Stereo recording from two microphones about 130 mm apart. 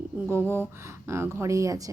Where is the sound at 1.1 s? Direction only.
20° right (ahead or behind).